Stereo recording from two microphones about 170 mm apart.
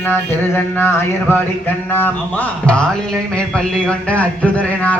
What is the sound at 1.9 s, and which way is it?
Speech, 10° left (ahead or behind).